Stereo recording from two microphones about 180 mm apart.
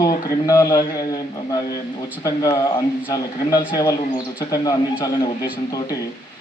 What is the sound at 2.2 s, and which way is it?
A man's voice, 20° left (ahead or behind).